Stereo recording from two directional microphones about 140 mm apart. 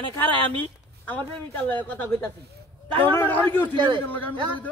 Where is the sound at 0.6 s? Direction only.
10° left (ahead or behind).